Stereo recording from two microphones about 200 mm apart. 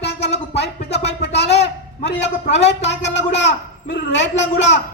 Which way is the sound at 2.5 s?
60° left (ahead or behind).